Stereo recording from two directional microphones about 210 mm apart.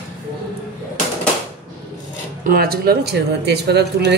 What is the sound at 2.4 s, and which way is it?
Speech, 45° right (ahead or behind).